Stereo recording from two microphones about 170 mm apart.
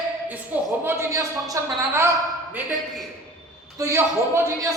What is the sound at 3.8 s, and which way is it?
Speech, 20° right (ahead or behind).